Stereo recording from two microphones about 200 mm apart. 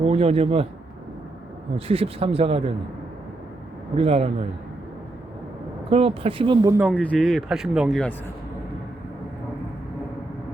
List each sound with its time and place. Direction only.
0.0 s speech: 30° right (ahead or behind)
1.7 s speech: 30° right (ahead or behind)
3.9 s a man's voice: 30° right (ahead or behind)
5.9 s speech: 30° right (ahead or behind)
7.0 s speech: centre (ahead or behind)